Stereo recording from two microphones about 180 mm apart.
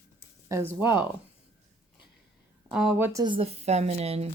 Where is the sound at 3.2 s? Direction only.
30° right (ahead or behind).